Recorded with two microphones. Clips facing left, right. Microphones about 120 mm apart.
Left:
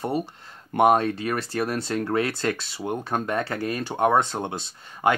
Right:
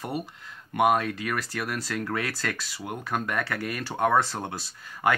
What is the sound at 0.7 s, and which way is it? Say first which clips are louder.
Speech: left 4 dB; 30° left (ahead or behind).